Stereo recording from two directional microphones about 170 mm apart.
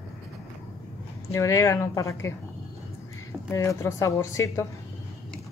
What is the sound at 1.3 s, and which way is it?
Speech, 15° left (ahead or behind).